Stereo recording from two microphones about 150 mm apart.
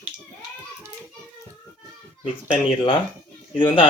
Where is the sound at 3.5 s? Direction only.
35° left (ahead or behind).